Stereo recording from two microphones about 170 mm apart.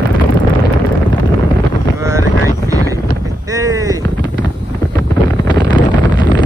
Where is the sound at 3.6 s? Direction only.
20° right (ahead or behind).